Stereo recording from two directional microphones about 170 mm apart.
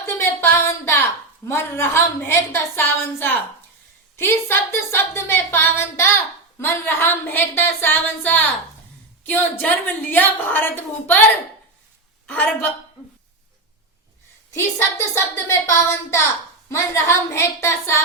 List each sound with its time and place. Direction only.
0.0 s a sound: 15° left (ahead or behind)
1.5 s a woman's voice: 15° left (ahead or behind)
14.5 s a woman's voice: 15° left (ahead or behind)